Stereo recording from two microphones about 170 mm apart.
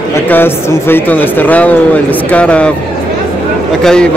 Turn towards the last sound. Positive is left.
turn(degrees=5)  # may be behind; listen again after turning